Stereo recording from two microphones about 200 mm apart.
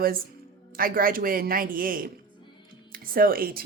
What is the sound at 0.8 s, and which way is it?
Speech, 45° right (ahead or behind).